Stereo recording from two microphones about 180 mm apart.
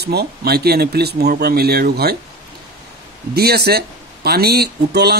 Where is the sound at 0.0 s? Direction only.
65° right (ahead or behind).